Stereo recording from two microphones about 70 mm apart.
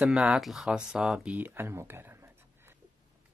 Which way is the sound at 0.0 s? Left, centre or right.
Centre.